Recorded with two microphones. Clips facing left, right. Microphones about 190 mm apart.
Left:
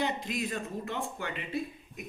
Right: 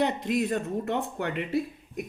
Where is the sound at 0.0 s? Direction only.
60° right (ahead or behind).